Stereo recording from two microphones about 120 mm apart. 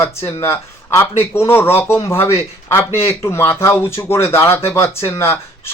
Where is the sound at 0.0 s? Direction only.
25° left (ahead or behind).